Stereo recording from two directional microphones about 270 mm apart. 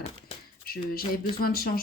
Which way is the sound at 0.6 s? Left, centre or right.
Left.